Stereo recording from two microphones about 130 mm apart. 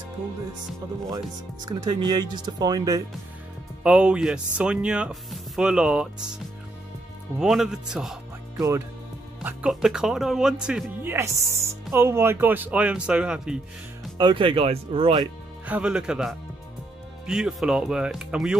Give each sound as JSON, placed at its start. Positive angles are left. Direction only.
{"t": 1.9, "sound": "speech", "side_deg": -30}
{"t": 3.8, "sound": "speech", "side_deg": -10}
{"t": 7.3, "sound": "speech", "side_deg": -5}
{"t": 8.5, "sound": "speech", "side_deg": -25}
{"t": 9.4, "sound": "speech", "side_deg": -10}
{"t": 11.0, "sound": "speech", "side_deg": -20}
{"t": 14.1, "sound": "speech", "side_deg": -40}
{"t": 15.6, "sound": "speech", "side_deg": -10}